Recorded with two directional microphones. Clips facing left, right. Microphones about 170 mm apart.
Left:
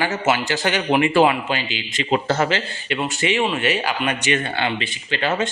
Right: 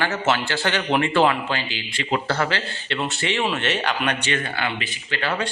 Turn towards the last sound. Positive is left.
turn(degrees=25)  # may be behind; listen again after turning